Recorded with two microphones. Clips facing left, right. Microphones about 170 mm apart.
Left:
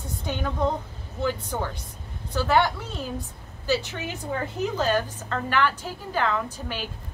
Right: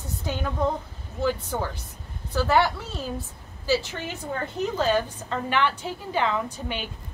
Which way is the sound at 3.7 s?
Centre (ahead or behind).